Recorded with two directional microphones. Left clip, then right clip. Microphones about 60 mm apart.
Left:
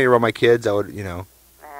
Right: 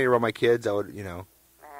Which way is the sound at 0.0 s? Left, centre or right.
Left.